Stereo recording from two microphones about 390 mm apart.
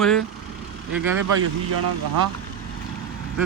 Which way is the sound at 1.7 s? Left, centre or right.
Right.